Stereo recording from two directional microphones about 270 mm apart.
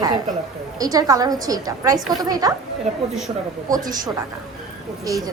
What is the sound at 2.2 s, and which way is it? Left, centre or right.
Speech, centre.